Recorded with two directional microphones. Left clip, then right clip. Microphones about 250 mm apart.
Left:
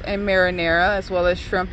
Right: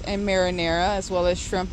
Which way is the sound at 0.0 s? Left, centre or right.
Centre.